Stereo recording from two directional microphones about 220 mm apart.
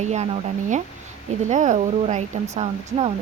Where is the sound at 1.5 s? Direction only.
35° right (ahead or behind).